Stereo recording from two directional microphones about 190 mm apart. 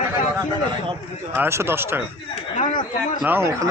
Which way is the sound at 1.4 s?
15° right (ahead or behind).